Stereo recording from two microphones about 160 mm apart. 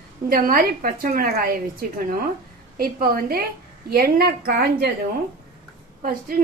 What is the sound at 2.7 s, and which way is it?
A woman's voice, 70° right (ahead or behind).